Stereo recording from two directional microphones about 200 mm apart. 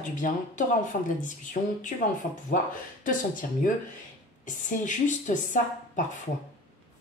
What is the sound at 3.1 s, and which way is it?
Speech, 40° left (ahead or behind).